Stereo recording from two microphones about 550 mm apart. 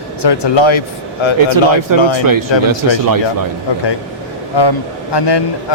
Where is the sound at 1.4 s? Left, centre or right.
Right.